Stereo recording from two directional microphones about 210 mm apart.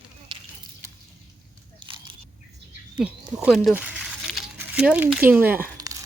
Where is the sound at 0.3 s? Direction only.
20° right (ahead or behind).